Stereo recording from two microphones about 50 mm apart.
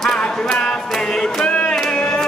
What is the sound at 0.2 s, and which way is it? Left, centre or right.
Music, centre.